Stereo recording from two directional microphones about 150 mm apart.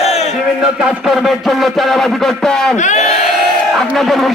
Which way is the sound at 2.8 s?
50° left (ahead or behind).